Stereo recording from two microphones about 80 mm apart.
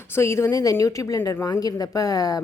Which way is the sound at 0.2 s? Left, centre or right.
Left.